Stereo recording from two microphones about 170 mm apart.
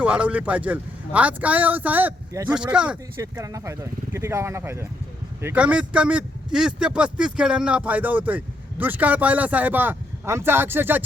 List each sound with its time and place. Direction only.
0.0 s speech: 5° right (ahead or behind)
3.2 s speech: 20° right (ahead or behind)